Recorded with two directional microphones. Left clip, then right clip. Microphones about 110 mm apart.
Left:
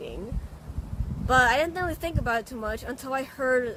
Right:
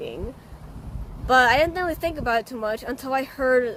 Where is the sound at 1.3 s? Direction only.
50° right (ahead or behind).